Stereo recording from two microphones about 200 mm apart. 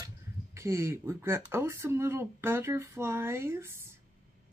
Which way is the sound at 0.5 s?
15° right (ahead or behind).